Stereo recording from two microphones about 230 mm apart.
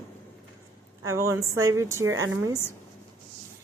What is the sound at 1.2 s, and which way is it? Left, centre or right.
Speech, centre.